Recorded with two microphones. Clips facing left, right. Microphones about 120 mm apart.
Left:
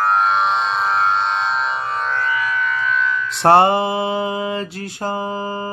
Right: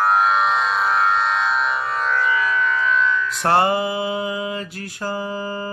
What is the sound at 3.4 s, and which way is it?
Mantra, 30° left (ahead or behind).